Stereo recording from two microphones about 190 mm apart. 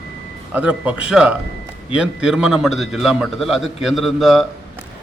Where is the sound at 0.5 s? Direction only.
5° right (ahead or behind).